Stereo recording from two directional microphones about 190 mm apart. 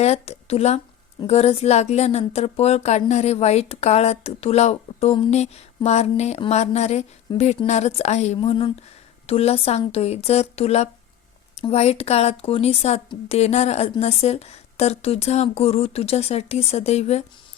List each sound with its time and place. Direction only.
0.0 s a woman's voice: 35° left (ahead or behind)